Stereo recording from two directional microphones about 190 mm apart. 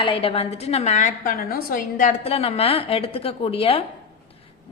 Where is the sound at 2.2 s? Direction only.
30° left (ahead or behind).